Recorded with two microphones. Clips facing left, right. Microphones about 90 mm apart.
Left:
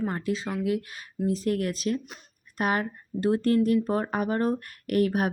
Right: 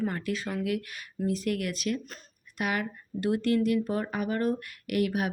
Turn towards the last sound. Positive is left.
turn(degrees=40)  # may be behind; listen again after turning